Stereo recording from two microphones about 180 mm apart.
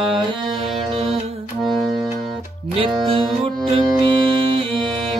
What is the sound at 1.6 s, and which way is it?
Music, centre (ahead or behind).